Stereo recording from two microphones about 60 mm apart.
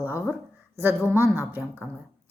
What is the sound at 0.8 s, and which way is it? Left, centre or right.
Speech, right.